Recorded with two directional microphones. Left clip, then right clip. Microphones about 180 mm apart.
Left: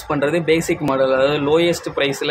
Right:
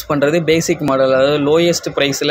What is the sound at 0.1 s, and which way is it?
Speech, 15° right (ahead or behind).